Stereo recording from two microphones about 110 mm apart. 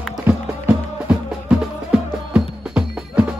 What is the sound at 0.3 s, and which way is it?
Music, 15° right (ahead or behind).